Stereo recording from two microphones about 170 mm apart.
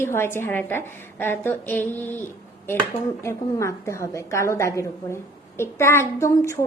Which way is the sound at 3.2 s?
15° left (ahead or behind).